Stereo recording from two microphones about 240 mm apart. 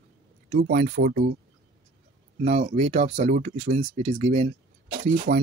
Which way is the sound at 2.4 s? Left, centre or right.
Right.